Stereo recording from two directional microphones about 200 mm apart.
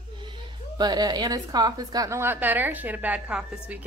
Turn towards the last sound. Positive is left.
turn(degrees=-5)  # may be behind; listen again after turning